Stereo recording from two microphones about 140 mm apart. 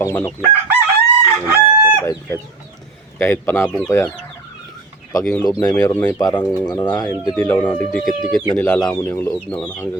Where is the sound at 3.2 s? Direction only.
15° left (ahead or behind).